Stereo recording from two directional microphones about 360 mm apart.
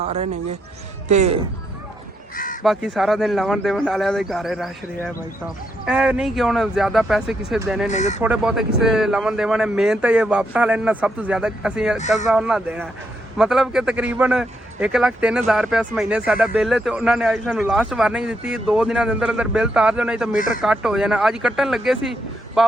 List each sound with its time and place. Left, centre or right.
1.0 s speech: centre
2.3 s crow: left
2.6 s a man's voice: centre
7.9 s speech: centre
8.2 s a man's voice: centre